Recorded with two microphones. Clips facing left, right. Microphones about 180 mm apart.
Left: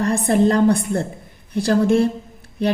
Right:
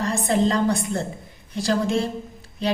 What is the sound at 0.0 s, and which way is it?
A woman's voice, 60° left (ahead or behind).